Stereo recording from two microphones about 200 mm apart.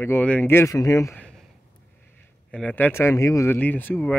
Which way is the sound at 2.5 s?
5° left (ahead or behind).